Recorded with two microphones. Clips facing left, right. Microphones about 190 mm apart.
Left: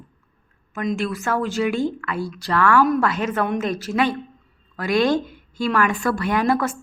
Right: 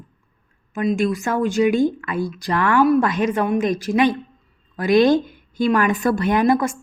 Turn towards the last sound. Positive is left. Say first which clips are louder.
# right 3 dB
turn(degrees=-15)  # may be behind; listen again after turning